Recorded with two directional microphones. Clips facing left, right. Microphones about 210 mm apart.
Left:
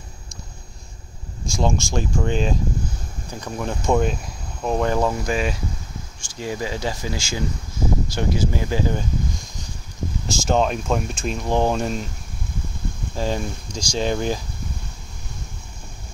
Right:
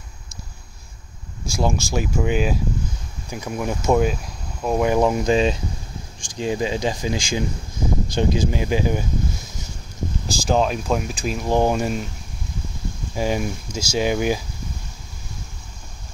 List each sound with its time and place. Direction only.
1.5 s speech: 5° right (ahead or behind)
10.2 s speech: centre (ahead or behind)
13.1 s speech: 10° right (ahead or behind)